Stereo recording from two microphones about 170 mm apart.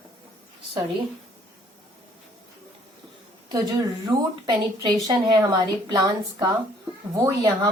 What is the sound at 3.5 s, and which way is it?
A woman's voice, 20° right (ahead or behind).